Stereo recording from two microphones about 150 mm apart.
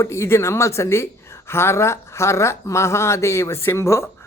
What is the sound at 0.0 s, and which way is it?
Speech, 20° left (ahead or behind).